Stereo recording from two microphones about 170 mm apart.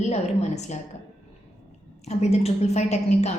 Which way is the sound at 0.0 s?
40° left (ahead or behind).